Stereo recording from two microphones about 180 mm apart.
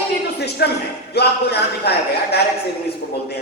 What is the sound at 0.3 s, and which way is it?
A woman's voice, 65° left (ahead or behind).